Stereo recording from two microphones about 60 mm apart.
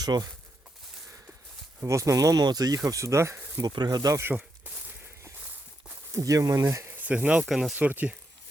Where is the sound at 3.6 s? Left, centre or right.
Right.